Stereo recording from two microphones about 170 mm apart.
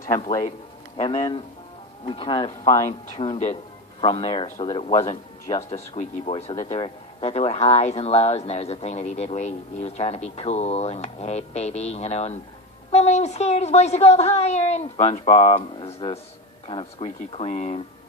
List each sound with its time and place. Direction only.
0.1 s speech: 20° left (ahead or behind)
3.2 s speech: 40° left (ahead or behind)
4.0 s speech: 30° left (ahead or behind)